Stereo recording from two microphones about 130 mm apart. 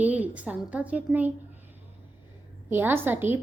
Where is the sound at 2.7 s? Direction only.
15° right (ahead or behind).